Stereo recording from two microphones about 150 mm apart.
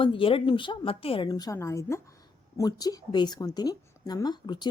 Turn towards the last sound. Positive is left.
turn(degrees=30)  # may be behind; listen again after turning